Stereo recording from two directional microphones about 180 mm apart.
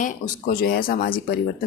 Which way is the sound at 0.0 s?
55° left (ahead or behind).